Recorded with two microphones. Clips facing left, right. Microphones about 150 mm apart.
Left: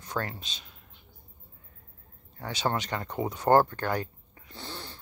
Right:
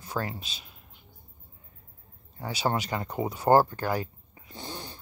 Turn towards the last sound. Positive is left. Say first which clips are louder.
# right 2 dB
turn(degrees=-15)  # may be behind; listen again after turning